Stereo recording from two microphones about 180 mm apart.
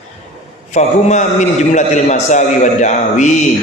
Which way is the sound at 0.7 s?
40° left (ahead or behind).